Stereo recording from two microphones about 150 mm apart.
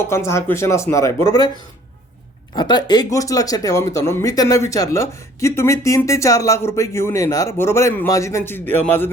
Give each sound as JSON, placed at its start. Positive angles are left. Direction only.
{"t": 0.0, "sound": "speech", "side_deg": 15}
{"t": 2.6, "sound": "speech", "side_deg": 30}